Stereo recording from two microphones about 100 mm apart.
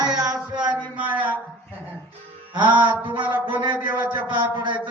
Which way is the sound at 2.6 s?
50° right (ahead or behind).